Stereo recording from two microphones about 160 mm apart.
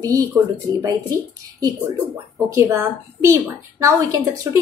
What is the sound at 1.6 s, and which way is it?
A woman's voice, 25° right (ahead or behind).